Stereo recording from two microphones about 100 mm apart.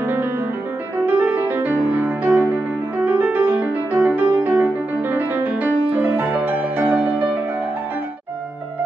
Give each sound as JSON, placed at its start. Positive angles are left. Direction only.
{"t": 0.0, "sound": "music", "side_deg": -20}